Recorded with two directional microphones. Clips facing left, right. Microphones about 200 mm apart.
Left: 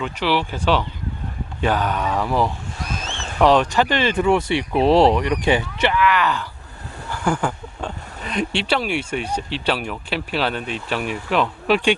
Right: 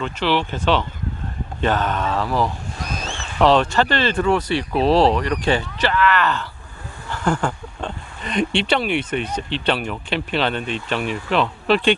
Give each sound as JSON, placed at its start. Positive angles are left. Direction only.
{"t": 0.0, "sound": "speech", "side_deg": 10}